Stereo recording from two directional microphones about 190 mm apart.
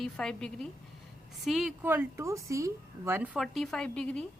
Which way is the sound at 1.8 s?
10° right (ahead or behind).